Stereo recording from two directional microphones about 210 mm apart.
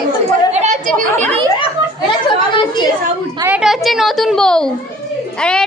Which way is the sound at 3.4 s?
5° right (ahead or behind).